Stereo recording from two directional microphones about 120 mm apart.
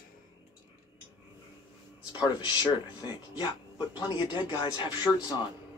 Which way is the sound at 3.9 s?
35° left (ahead or behind).